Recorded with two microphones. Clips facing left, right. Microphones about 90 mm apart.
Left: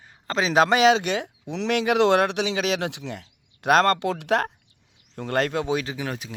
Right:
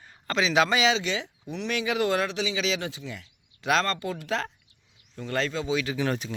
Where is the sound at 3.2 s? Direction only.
55° left (ahead or behind).